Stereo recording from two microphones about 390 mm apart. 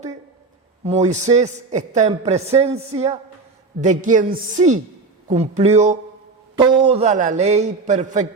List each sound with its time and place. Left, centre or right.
0.9 s a man's voice: centre